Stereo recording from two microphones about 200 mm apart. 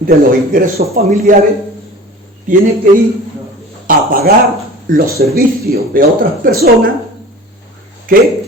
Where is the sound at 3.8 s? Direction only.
45° right (ahead or behind).